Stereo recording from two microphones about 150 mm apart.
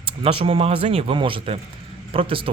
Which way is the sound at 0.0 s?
35° right (ahead or behind).